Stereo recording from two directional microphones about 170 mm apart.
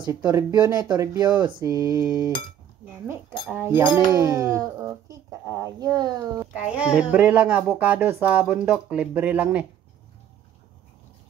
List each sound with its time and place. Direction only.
0.1 s speech: 15° right (ahead or behind)
6.3 s speech: 10° right (ahead or behind)